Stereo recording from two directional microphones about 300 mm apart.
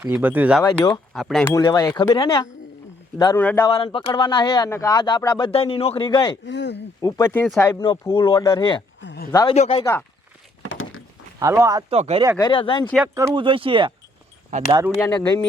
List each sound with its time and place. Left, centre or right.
0.0 s speech: centre
0.6 s a man's voice: centre
6.4 s speech: left
7.0 s a man's voice: centre
9.0 s a sound: left
9.3 s a man's voice: centre
10.7 s a sound: left
11.3 s speech: centre
12.4 s a man's voice: centre
13.1 s speech: centre